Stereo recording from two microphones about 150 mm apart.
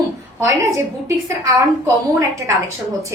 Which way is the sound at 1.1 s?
20° right (ahead or behind).